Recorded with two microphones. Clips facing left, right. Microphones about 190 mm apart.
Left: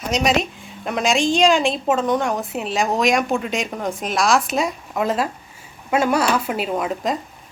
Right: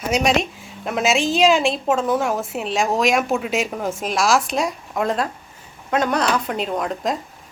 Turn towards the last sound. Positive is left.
turn(degrees=0)  # may be behind; listen again after turning